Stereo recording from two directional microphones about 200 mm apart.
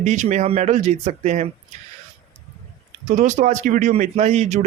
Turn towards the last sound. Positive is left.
turn(degrees=-35)  # may be behind; listen again after turning